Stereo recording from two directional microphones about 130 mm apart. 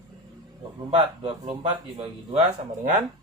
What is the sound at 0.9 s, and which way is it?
Speech, 45° right (ahead or behind).